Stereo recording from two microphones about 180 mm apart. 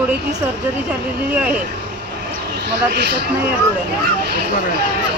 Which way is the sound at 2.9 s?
70° right (ahead or behind).